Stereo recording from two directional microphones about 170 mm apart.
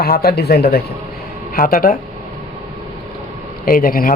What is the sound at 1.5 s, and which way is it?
Speech, 55° left (ahead or behind).